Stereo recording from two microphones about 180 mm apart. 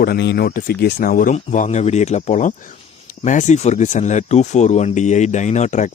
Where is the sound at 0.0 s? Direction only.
65° left (ahead or behind).